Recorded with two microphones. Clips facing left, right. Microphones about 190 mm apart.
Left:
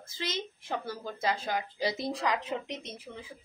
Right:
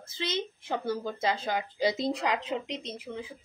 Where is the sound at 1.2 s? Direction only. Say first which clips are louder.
Even; 25° right (ahead or behind).